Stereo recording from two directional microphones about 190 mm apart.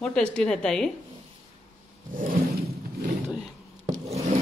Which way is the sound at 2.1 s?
45° right (ahead or behind).